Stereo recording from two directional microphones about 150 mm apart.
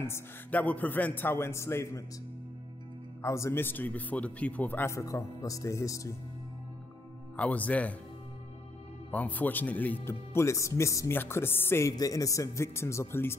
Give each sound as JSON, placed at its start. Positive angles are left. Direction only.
{"t": 0.0, "sound": "speech", "side_deg": 15}
{"t": 3.2, "sound": "speech", "side_deg": 20}
{"t": 7.3, "sound": "speech", "side_deg": 10}
{"t": 9.1, "sound": "speech", "side_deg": 10}